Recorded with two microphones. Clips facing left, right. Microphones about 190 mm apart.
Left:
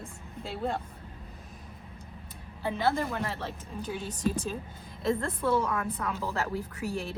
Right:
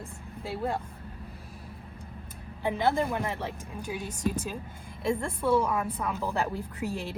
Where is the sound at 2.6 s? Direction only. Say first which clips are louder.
Right 2 dB; 15° right (ahead or behind).